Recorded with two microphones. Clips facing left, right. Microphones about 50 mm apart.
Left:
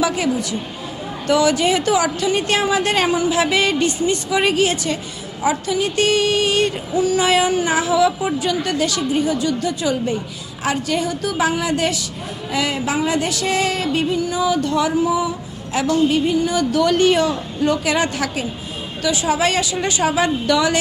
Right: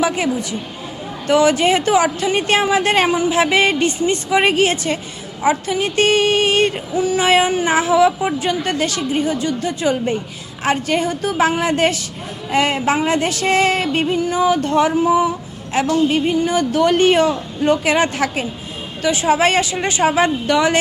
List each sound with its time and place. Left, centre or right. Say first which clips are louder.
0.0 s a woman's voice: right 1 dB; right
1.3 s female singing: right 2 dB; right